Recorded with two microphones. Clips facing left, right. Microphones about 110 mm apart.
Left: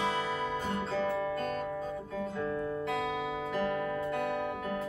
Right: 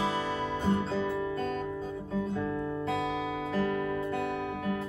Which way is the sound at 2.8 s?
25° right (ahead or behind).